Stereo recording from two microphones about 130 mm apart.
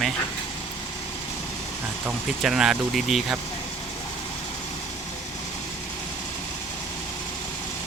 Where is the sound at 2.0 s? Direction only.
5° right (ahead or behind).